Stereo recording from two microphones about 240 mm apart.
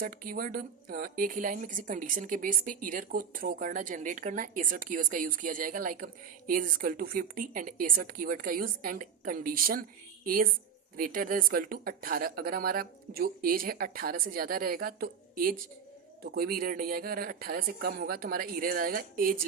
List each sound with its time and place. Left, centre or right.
0.0 s a woman's voice: right